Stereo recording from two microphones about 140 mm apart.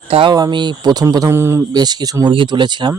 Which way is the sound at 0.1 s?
40° right (ahead or behind).